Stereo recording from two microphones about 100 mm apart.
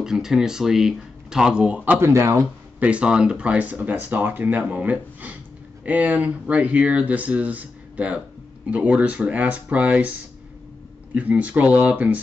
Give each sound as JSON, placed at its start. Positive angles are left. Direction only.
{"t": 0.0, "sound": "speech", "side_deg": -5}
{"t": 2.0, "sound": "speech", "side_deg": -25}
{"t": 2.8, "sound": "speech", "side_deg": -10}
{"t": 11.1, "sound": "speech", "side_deg": -15}